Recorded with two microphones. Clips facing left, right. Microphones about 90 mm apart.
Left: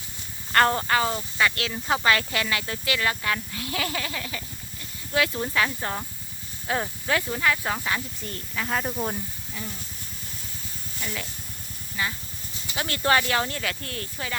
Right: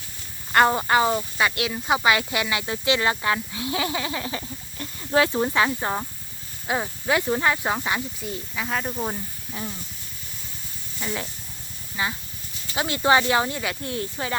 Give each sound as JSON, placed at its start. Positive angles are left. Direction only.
{"t": 0.5, "sound": "speech", "side_deg": -15}
{"t": 9.5, "sound": "speech", "side_deg": -30}
{"t": 11.0, "sound": "speech", "side_deg": -25}